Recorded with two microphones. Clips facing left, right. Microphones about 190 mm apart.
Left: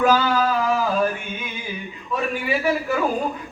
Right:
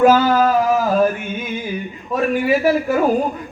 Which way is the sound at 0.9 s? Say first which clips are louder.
Right 6 dB; 45° right (ahead or behind).